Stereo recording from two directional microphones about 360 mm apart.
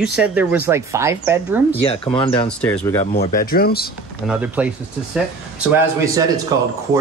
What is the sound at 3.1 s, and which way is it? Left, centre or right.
Speech, left.